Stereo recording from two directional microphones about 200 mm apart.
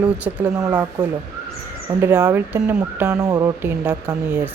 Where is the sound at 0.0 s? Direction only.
10° right (ahead or behind).